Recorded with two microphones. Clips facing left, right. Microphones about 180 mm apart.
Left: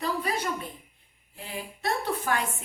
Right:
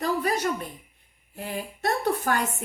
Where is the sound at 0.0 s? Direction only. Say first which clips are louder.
Right 4 dB; 45° right (ahead or behind).